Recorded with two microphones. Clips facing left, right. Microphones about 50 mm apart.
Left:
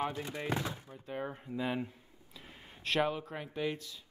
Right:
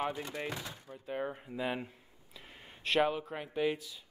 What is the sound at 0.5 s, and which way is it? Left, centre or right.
Speech, left.